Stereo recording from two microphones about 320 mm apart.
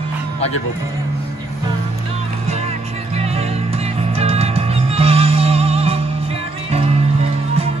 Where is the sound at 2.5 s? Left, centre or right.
Centre.